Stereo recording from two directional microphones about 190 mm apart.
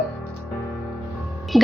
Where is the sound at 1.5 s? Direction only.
Centre (ahead or behind).